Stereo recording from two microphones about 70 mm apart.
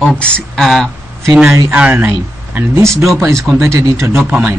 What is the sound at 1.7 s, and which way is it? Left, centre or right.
Speech, centre.